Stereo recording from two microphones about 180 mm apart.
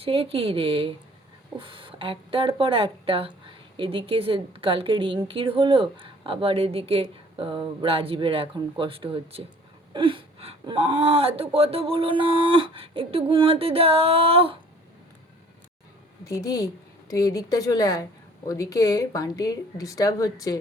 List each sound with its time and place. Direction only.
0.0 s speech: 30° right (ahead or behind)
16.2 s speech: 20° left (ahead or behind)